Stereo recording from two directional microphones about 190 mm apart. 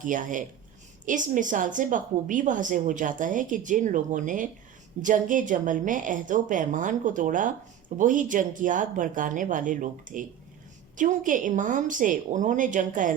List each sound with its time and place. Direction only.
0.0 s a woman's voice: 45° right (ahead or behind)